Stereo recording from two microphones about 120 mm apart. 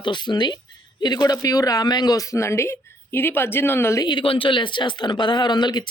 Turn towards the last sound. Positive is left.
turn(degrees=40)  # may be behind; listen again after turning